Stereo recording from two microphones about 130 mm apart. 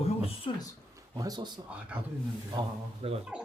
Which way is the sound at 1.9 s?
10° right (ahead or behind).